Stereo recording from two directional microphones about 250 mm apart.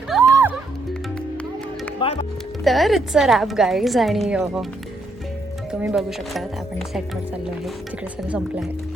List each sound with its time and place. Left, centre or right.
0.1 s music: centre
2.0 s music: left
2.6 s a woman's voice: centre
5.8 s a woman's voice: centre
8.3 s a woman's voice: centre